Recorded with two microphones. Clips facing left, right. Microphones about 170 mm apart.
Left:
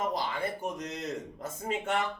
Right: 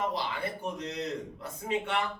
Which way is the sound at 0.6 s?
45° left (ahead or behind).